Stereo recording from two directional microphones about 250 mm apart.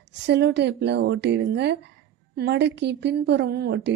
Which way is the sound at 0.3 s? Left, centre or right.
Right.